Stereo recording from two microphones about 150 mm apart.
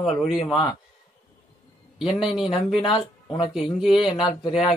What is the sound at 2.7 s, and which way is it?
A man's voice, 35° left (ahead or behind).